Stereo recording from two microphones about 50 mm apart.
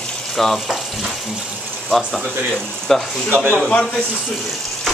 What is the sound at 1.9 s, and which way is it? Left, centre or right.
Speech, centre.